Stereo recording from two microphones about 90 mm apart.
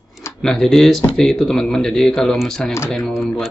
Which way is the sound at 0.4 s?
5° left (ahead or behind).